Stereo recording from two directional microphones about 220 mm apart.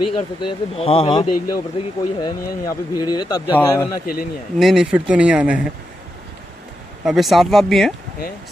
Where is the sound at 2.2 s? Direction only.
20° left (ahead or behind).